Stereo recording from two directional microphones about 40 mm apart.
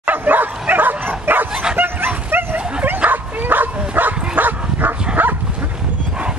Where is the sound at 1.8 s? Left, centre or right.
Right.